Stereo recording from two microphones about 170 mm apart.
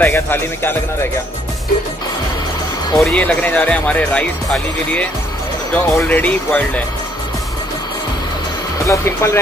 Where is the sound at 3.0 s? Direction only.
5° left (ahead or behind).